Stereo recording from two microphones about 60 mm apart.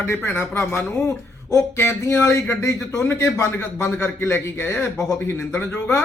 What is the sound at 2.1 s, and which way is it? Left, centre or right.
A man's voice, left.